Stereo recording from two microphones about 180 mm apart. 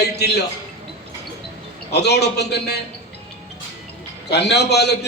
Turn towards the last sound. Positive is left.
turn(degrees=65)  # may be behind; listen again after turning